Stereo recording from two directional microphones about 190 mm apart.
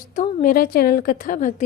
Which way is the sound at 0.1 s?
40° left (ahead or behind).